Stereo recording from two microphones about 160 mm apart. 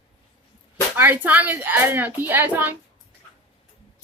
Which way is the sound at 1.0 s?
10° right (ahead or behind).